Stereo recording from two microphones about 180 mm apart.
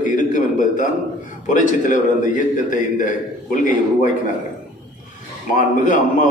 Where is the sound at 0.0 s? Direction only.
45° left (ahead or behind).